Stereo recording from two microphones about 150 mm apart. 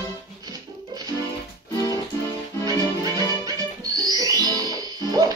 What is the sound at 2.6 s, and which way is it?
Music, 25° right (ahead or behind).